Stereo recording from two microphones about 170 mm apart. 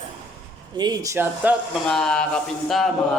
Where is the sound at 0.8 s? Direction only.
20° right (ahead or behind).